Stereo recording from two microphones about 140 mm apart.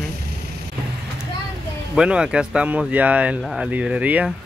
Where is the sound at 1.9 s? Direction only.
5° right (ahead or behind).